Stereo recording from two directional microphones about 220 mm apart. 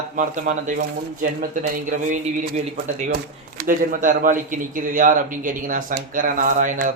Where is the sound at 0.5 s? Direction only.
35° right (ahead or behind).